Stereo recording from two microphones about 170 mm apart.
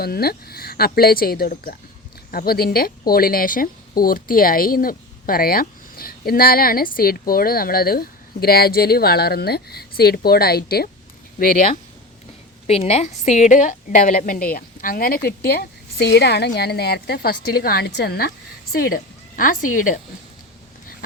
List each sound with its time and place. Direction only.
0.0 s speech: 65° left (ahead or behind)
11.3 s speech: 55° left (ahead or behind)
12.6 s a woman's voice: 35° left (ahead or behind); by 15.2 s 60° left (ahead or behind)
15.3 s a woman's voice: 70° left (ahead or behind); by 20.0 s 50° left (ahead or behind)